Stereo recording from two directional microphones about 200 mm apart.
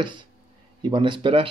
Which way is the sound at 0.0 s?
25° right (ahead or behind).